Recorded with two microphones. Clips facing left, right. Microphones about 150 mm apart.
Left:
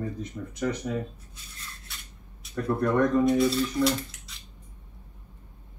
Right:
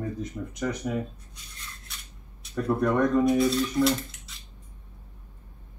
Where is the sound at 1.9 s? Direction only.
Centre (ahead or behind).